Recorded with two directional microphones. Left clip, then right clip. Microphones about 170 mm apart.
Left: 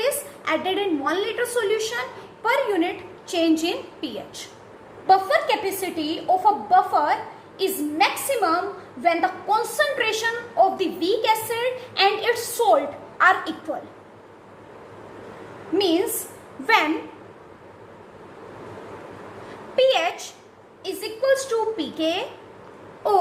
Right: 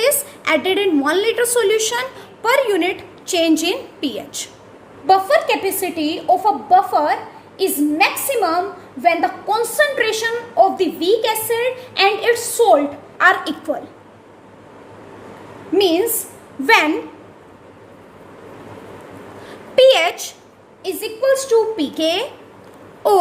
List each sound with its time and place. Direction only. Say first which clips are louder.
0.0 s a woman's voice: right 7 dB; 55° right (ahead or behind)
5.0 s a woman's voice: right 4 dB; 40° right (ahead or behind)
19.7 s a woman's voice: right 8 dB; 50° right (ahead or behind)
20.8 s a woman's voice: right 5 dB; 40° right (ahead or behind)